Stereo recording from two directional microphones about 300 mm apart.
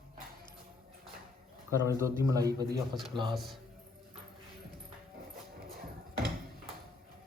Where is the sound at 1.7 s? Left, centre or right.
Centre.